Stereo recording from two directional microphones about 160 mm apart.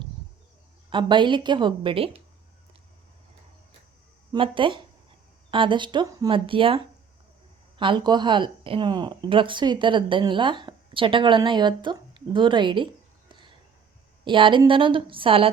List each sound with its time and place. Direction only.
0.9 s a woman's voice: 30° right (ahead or behind)
4.3 s speech: 30° right (ahead or behind)
7.8 s speech: 30° right (ahead or behind)